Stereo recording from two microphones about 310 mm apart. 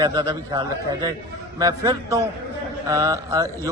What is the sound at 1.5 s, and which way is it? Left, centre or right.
A man's voice, centre.